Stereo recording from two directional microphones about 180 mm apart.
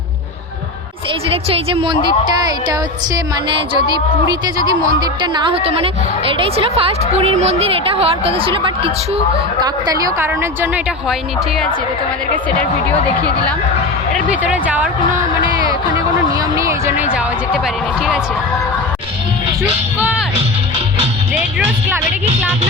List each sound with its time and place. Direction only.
1.3 s a woman's voice: 35° right (ahead or behind)
3.8 s a woman's voice: 25° right (ahead or behind)
14.1 s speech: 5° right (ahead or behind)
16.4 s a sound: 15° right (ahead or behind)
20.0 s speech: 5° right (ahead or behind)
21.3 s speech: 10° right (ahead or behind)